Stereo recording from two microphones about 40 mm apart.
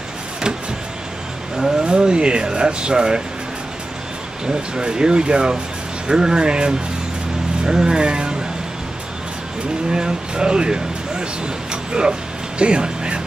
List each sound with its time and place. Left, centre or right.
1.8 s speech: right
4.5 s speech: centre
9.8 s speech: centre